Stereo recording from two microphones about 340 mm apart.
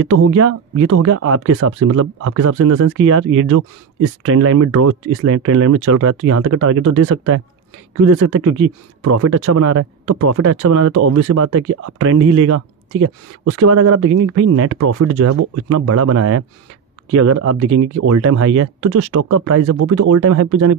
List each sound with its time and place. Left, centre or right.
0.1 s speech: right